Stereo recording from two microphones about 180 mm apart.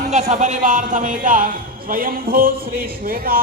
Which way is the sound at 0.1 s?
40° right (ahead or behind).